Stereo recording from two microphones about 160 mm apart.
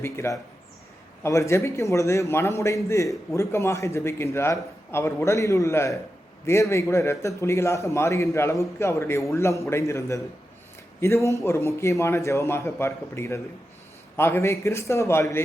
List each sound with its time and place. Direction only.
0.0 s a man's voice: 15° left (ahead or behind)